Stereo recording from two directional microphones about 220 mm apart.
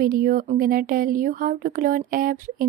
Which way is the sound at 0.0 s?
40° right (ahead or behind).